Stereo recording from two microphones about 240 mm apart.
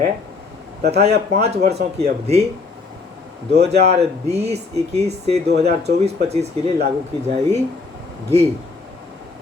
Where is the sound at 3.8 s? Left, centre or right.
Right.